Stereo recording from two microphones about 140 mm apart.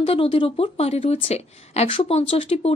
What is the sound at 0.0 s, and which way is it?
Speech, 40° left (ahead or behind).